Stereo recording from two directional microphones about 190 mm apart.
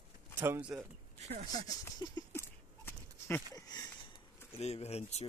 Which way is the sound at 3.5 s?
20° left (ahead or behind).